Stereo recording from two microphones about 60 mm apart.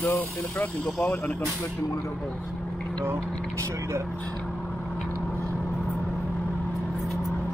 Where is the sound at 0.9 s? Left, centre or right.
Left.